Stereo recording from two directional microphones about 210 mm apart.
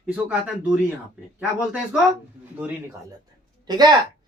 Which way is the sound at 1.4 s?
Centre (ahead or behind).